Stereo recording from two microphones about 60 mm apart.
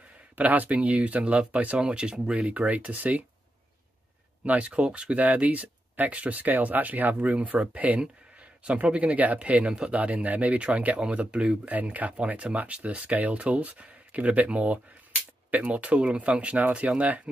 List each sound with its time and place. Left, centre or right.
0.4 s speech: right
4.5 s speech: right
8.0 s a sound: centre
8.8 s speech: centre